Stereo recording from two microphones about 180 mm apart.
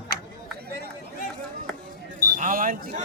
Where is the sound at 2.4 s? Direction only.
50° right (ahead or behind).